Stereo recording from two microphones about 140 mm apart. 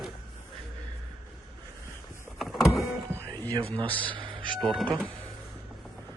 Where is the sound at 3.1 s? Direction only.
10° left (ahead or behind).